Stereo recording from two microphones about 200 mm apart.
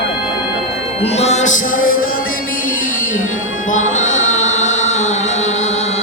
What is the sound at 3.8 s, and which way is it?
Music, 40° left (ahead or behind).